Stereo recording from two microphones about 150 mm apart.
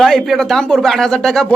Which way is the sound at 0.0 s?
Centre (ahead or behind).